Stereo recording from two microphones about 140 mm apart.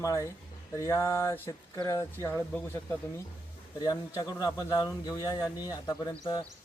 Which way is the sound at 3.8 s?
30° left (ahead or behind).